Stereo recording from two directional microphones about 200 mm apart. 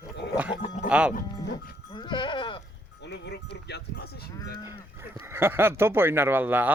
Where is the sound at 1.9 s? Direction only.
25° left (ahead or behind).